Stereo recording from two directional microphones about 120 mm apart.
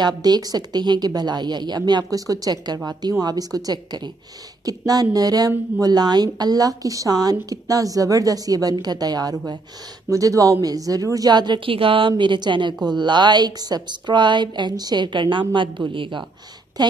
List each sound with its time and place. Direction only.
0.0 s a woman's voice: 35° right (ahead or behind)